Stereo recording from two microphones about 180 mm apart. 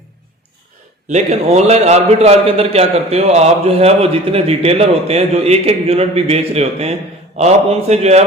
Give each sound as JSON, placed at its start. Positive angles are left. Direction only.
{"t": 1.0, "sound": "a man's voice", "side_deg": -40}